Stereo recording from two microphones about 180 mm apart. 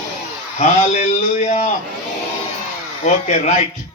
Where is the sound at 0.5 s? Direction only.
40° left (ahead or behind).